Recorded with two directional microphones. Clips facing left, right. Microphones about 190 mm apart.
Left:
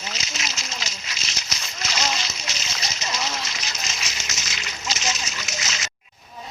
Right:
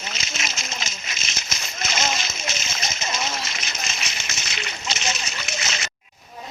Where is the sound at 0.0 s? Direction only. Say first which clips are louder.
Right 1 dB; 55° right (ahead or behind).